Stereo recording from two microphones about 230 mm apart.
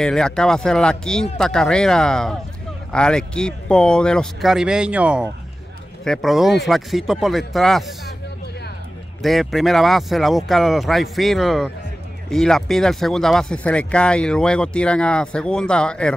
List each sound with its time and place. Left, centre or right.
0.0 s speech: centre
9.2 s speech: centre